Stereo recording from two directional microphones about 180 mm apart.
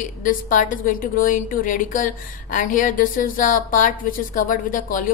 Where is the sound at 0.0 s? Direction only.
45° left (ahead or behind).